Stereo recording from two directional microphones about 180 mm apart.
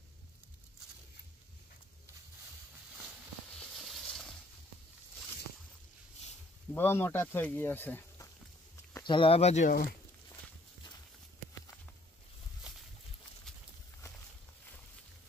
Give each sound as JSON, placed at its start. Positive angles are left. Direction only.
{"t": 3.5, "sound": "a sound", "side_deg": 0}
{"t": 6.7, "sound": "speech", "side_deg": 10}
{"t": 9.0, "sound": "speech", "side_deg": 30}